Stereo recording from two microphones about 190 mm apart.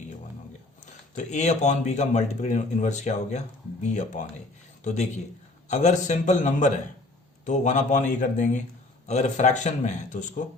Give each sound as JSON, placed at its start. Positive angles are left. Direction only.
{"t": 1.1, "sound": "speech", "side_deg": 40}